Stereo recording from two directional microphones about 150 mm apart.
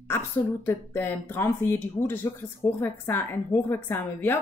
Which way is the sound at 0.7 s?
15° left (ahead or behind).